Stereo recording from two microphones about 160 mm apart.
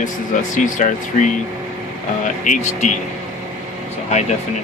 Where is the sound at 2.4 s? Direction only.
50° left (ahead or behind).